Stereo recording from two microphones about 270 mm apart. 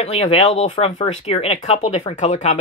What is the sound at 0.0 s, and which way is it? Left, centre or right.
Speech, left.